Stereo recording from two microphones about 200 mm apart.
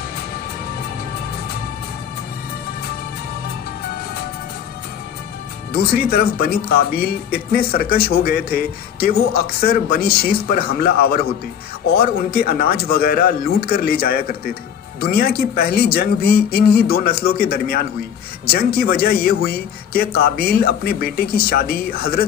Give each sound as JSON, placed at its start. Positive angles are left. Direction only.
{"t": 5.7, "sound": "speech", "side_deg": 50}